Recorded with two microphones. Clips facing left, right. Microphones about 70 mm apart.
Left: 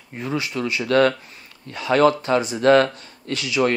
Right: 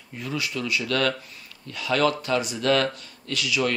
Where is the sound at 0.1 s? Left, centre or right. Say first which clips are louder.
Left 4 dB; left.